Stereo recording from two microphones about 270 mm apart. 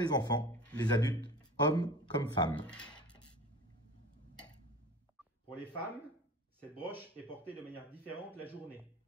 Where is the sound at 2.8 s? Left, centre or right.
Centre.